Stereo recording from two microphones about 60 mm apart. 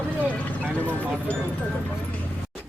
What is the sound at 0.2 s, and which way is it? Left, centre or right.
Vehicle, left.